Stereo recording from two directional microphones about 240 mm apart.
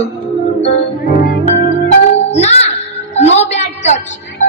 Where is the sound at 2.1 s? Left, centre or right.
Left.